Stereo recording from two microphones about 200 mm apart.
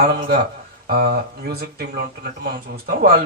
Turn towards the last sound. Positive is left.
turn(degrees=-50)  # may be behind; listen again after turning